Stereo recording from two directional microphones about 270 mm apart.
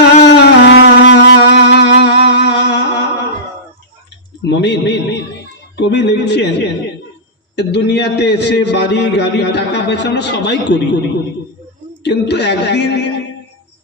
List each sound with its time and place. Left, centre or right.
0.2 s music: left
4.4 s a man's voice: left
7.5 s a man's voice: left
12.0 s a man's voice: left